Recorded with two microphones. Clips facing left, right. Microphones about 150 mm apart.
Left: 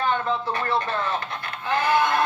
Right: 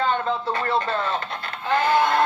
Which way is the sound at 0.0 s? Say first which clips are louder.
Right 1 dB; 20° right (ahead or behind).